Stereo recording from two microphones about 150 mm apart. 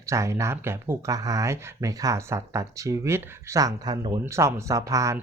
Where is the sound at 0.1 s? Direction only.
20° right (ahead or behind).